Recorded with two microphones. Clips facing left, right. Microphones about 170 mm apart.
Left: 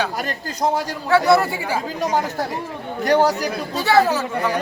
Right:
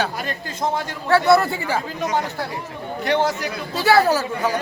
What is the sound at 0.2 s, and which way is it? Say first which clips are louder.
Speech: left 3 dB; 40° left (ahead or behind).